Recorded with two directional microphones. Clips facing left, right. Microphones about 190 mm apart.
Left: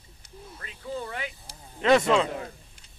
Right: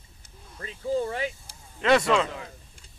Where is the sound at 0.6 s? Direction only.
30° right (ahead or behind).